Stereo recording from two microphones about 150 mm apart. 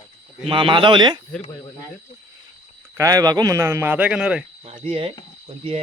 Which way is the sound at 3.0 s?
25° right (ahead or behind).